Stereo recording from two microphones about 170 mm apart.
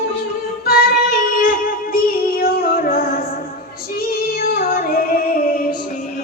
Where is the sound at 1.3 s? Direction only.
55° left (ahead or behind).